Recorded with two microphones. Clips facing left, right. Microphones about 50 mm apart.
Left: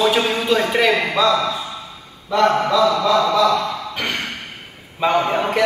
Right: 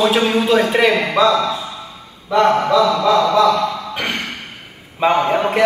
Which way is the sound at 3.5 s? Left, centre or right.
Centre.